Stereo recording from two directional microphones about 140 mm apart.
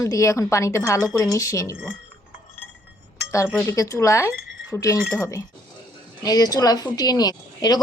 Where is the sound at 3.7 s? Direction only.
20° left (ahead or behind).